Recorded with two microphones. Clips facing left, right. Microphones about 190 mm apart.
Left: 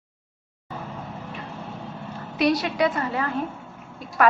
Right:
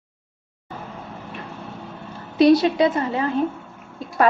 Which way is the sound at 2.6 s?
25° right (ahead or behind).